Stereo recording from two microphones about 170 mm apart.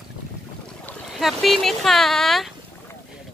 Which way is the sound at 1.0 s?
Centre (ahead or behind).